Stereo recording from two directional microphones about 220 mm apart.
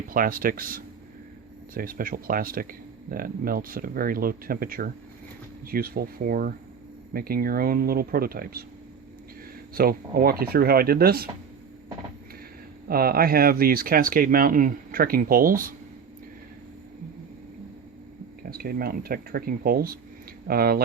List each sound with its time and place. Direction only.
0.1 s speech: 40° right (ahead or behind)
9.7 s speech: 40° right (ahead or behind)
12.9 s speech: 40° right (ahead or behind)
18.5 s speech: 45° right (ahead or behind)